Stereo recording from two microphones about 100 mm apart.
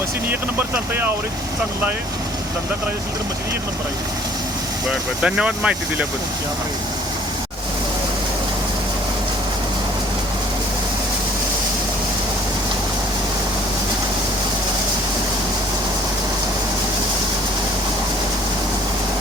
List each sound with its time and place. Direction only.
0.3 s speech: 20° right (ahead or behind)
5.2 s speech: 10° right (ahead or behind)